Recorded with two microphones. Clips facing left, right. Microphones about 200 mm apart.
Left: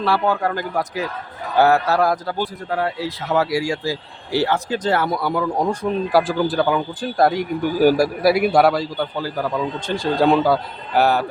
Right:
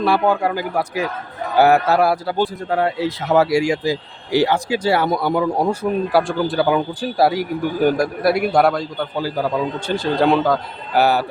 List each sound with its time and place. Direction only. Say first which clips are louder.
0.0 s speech: right 3 dB; 15° right (ahead or behind)
2.4 s speech: right 4 dB; 25° right (ahead or behind)
5.0 s a man's voice: right 3 dB; 20° right (ahead or behind); by 11.3 s 5° right (ahead or behind)